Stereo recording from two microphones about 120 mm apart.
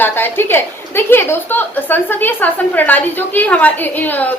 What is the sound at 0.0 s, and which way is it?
A woman's voice, 15° left (ahead or behind).